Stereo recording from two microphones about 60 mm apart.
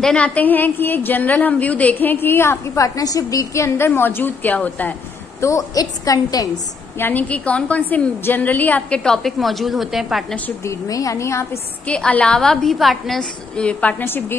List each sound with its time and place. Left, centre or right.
0.2 s a woman's voice: left
2.8 s a woman's voice: left
3.6 s a woman's voice: left
5.4 s a woman's voice: left
7.0 s a woman's voice: left
9.0 s a woman's voice: centre
10.9 s a woman's voice: left
11.8 s a woman's voice: centre
13.6 s a woman's voice: left